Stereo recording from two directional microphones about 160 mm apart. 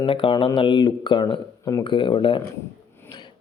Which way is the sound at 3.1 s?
25° left (ahead or behind).